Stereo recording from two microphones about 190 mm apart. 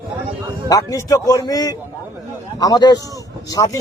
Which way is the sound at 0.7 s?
20° left (ahead or behind).